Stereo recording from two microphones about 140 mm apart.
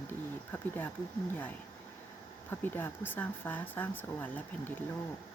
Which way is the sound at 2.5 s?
15° left (ahead or behind).